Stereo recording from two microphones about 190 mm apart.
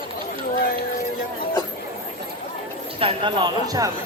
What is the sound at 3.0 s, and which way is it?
Speech, 25° right (ahead or behind).